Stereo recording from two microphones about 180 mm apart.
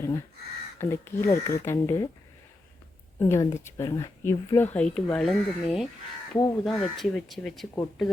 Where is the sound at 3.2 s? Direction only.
15° left (ahead or behind).